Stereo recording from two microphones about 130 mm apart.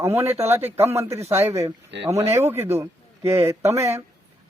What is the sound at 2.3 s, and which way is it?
A man's voice, 20° right (ahead or behind).